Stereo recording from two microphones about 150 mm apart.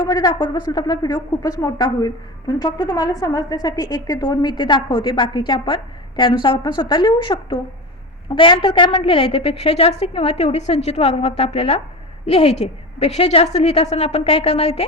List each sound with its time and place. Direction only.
0.0 s a woman's voice: 25° left (ahead or behind); by 14.8 s 40° left (ahead or behind)